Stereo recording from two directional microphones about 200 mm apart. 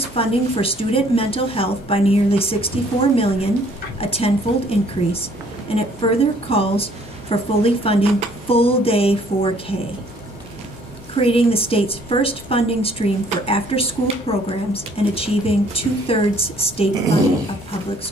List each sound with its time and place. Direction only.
0.1 s a woman's voice: 30° left (ahead or behind)
11.1 s a woman's voice: 30° left (ahead or behind)